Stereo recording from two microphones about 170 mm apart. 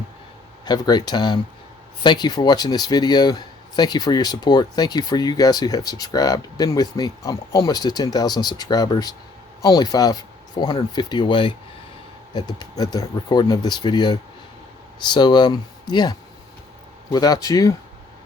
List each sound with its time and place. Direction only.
0.6 s speech: 25° left (ahead or behind)